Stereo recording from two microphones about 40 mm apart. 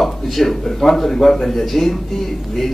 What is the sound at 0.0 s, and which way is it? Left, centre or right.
A man's voice, centre.